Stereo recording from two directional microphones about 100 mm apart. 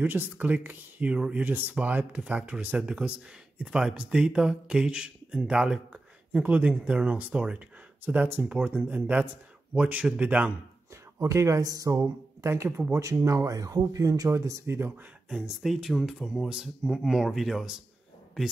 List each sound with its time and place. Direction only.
0.0 s speech: 15° right (ahead or behind)
11.1 s speech: 30° right (ahead or behind)
13.0 s speech: 30° right (ahead or behind)
15.2 s speech: 5° right (ahead or behind)